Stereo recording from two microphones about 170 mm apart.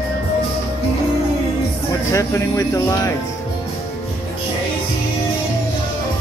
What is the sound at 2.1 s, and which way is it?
Speech, 20° left (ahead or behind).